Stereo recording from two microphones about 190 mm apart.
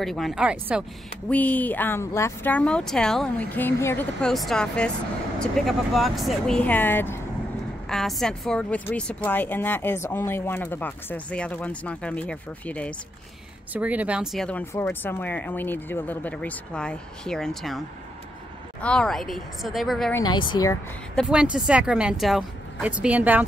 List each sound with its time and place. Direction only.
0.0 s speech: centre (ahead or behind)
1.3 s speech: 10° left (ahead or behind)
13.7 s speech: 10° right (ahead or behind)
20.2 s a woman's voice: 25° left (ahead or behind)
21.2 s speech: 5° right (ahead or behind)